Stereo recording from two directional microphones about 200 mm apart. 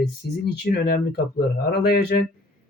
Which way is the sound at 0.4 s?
50° left (ahead or behind).